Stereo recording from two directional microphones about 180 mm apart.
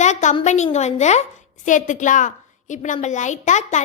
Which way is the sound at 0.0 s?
40° left (ahead or behind).